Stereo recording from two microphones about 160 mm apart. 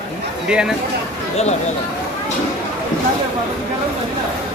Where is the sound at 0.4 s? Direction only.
5° right (ahead or behind).